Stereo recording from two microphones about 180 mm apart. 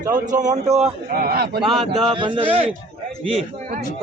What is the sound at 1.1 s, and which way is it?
Speech, 55° right (ahead or behind).